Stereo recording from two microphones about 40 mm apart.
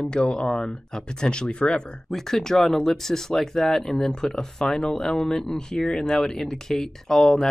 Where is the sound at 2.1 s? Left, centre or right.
Centre.